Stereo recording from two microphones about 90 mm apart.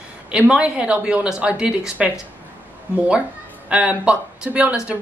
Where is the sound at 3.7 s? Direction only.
15° right (ahead or behind).